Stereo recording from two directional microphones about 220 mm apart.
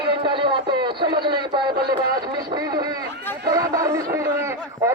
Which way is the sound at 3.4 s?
15° right (ahead or behind).